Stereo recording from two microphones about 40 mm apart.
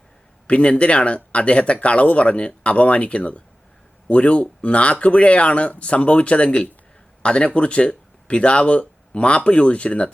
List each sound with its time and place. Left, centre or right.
0.4 s speech: left